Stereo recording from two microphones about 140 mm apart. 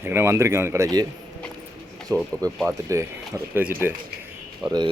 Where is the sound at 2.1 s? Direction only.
25° right (ahead or behind).